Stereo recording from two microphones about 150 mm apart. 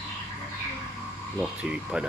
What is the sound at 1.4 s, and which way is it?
Speech, 5° right (ahead or behind).